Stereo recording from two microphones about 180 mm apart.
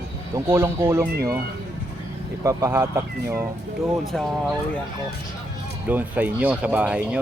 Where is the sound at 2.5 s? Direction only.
15° right (ahead or behind).